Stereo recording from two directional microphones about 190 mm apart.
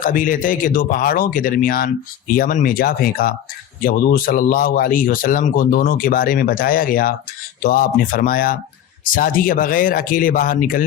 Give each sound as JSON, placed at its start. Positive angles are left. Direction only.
{"t": 0.0, "sound": "speech", "side_deg": 45}